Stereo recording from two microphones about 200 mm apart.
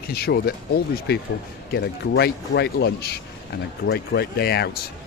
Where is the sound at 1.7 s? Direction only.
55° left (ahead or behind).